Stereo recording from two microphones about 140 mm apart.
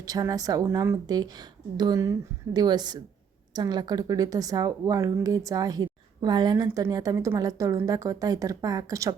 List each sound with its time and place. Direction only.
0.0 s speech: 25° right (ahead or behind)